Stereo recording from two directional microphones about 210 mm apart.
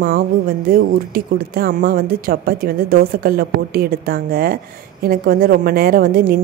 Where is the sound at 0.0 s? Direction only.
45° right (ahead or behind).